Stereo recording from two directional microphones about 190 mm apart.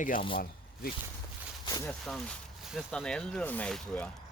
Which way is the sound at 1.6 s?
20° left (ahead or behind).